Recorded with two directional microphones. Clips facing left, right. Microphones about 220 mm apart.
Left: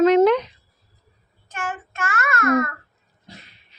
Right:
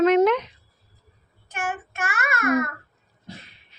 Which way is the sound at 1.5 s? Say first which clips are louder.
Even; 10° right (ahead or behind).